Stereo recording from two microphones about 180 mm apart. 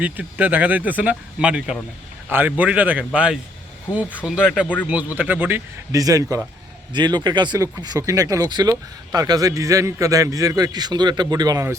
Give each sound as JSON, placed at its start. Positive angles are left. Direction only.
{"t": 0.0, "sound": "a man's voice", "side_deg": -10}